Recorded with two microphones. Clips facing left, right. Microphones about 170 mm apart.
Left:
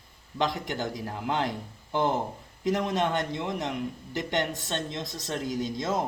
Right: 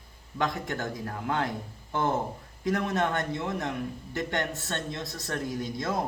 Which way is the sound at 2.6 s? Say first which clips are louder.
Left 1 dB; 20° left (ahead or behind).